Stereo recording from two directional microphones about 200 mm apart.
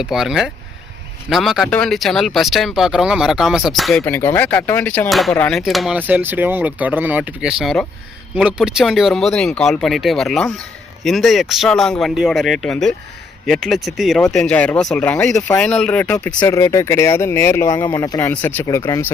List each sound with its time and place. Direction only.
0.0 s speech: centre (ahead or behind)
4.0 s speech: 10° left (ahead or behind)